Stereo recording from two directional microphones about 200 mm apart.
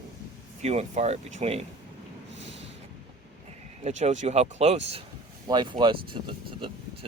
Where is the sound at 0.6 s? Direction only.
35° right (ahead or behind).